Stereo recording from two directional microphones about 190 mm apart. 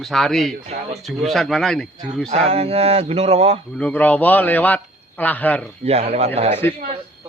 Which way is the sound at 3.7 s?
5° left (ahead or behind).